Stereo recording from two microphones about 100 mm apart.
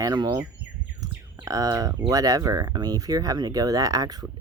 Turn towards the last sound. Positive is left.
turn(degrees=-40)  # may be behind; listen again after turning